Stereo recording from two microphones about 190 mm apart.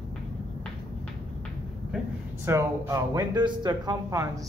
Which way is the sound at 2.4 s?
15° right (ahead or behind).